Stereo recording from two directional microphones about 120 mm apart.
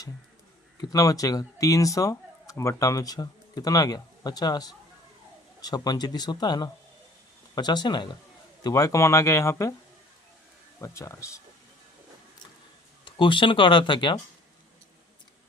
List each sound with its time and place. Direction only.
0.8 s speech: 30° left (ahead or behind)
8.6 s speech: 25° left (ahead or behind)
10.8 s speech: 25° left (ahead or behind)
13.1 s speech: 45° left (ahead or behind)